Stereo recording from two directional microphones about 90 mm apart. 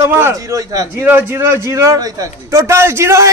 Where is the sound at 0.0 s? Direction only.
30° right (ahead or behind).